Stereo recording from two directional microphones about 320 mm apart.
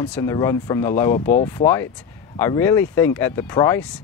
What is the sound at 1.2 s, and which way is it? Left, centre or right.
Speech, left.